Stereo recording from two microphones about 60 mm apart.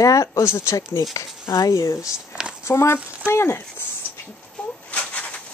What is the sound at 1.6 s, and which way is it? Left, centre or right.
Speech, left.